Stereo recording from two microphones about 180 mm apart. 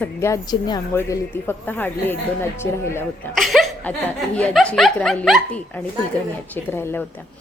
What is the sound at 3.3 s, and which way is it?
Chuckle, centre (ahead or behind).